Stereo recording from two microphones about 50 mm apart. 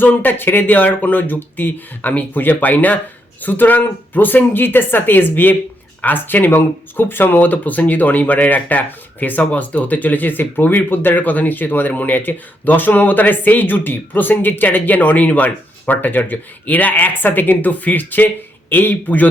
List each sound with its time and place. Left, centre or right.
0.0 s speech: left